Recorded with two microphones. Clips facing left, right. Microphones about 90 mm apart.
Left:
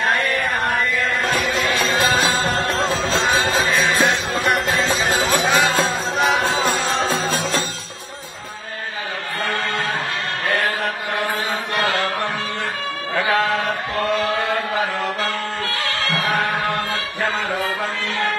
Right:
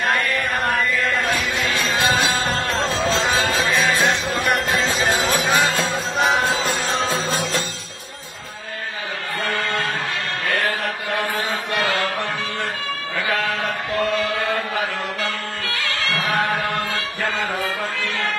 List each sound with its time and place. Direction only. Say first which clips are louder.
2.8 s music: left 1 dB; centre (ahead or behind)
5.3 s music: left 2 dB; 40° left (ahead or behind)
11.7 s mantra: left 1 dB; 30° left (ahead or behind)